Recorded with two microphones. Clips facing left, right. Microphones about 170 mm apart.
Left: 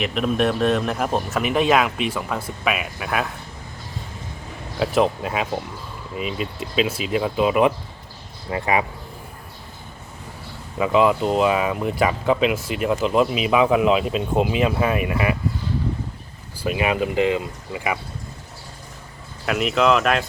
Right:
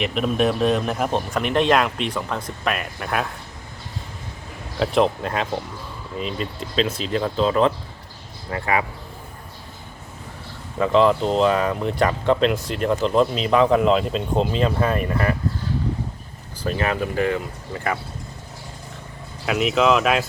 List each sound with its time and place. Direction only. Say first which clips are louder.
0.0 s speech: even; centre (ahead or behind)
4.8 s speech: even; 5° left (ahead or behind); by 8.8 s 20° left (ahead or behind)
10.8 s speech: right 1 dB; 5° left (ahead or behind)
16.6 s speech: left 2 dB; 15° left (ahead or behind)
19.5 s speech: even; centre (ahead or behind)